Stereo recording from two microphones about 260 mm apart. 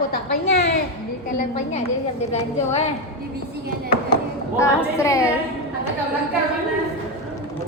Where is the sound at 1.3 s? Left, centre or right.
Left.